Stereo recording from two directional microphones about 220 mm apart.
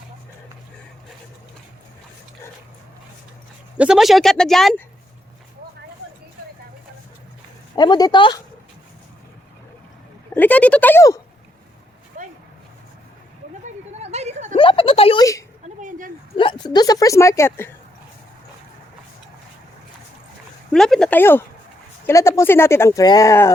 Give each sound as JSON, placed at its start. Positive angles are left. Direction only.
{"t": 3.8, "sound": "speech", "side_deg": -5}
{"t": 7.8, "sound": "speech", "side_deg": 20}
{"t": 10.3, "sound": "speech", "side_deg": 5}
{"t": 12.1, "sound": "dog", "side_deg": -35}
{"t": 13.7, "sound": "a sound", "side_deg": -30}
{"t": 14.5, "sound": "a sound", "side_deg": 25}
{"t": 15.8, "sound": "a sound", "side_deg": -35}
{"t": 16.4, "sound": "speech", "side_deg": 20}
{"t": 20.7, "sound": "speech", "side_deg": 0}